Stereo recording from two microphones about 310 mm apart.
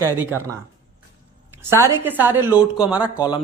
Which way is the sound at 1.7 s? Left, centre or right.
Centre.